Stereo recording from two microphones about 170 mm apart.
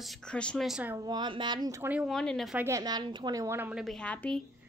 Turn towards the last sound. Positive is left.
turn(degrees=5)  # may be behind; listen again after turning